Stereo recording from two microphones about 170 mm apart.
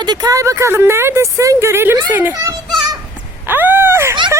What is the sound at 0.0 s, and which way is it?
Speech, 25° right (ahead or behind).